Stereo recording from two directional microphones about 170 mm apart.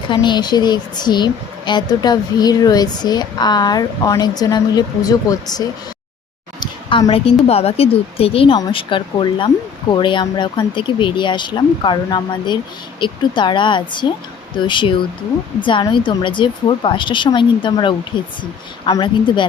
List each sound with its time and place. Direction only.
0.1 s a woman's voice: 25° left (ahead or behind)